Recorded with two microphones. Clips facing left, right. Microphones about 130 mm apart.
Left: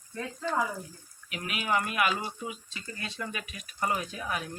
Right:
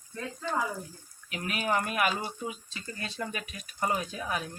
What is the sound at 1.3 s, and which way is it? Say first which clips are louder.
Speech: right 1 dB; 40° right (ahead or behind).